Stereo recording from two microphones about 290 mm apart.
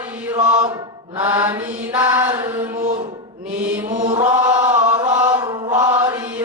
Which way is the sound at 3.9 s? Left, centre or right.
Centre.